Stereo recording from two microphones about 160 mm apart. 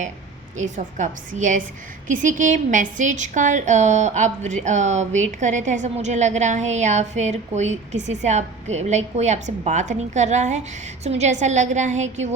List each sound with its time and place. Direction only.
0.5 s a woman's voice: 50° right (ahead or behind)